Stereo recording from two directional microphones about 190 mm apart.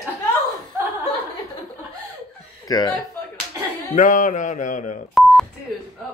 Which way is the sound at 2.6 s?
20° left (ahead or behind).